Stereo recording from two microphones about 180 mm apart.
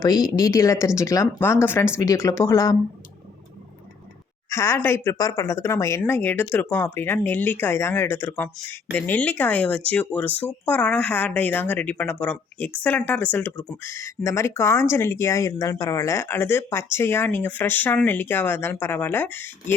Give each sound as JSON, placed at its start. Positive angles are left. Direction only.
{"t": 0.0, "sound": "speech", "side_deg": 20}
{"t": 4.4, "sound": "speech", "side_deg": 15}